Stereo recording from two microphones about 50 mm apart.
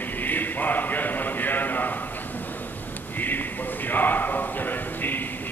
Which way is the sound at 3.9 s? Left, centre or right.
Left.